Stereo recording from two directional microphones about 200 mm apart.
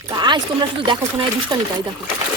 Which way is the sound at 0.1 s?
20° right (ahead or behind).